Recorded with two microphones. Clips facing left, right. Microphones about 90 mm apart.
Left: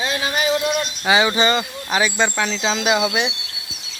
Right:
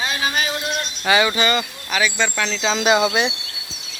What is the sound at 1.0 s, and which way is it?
Speech, 15° left (ahead or behind).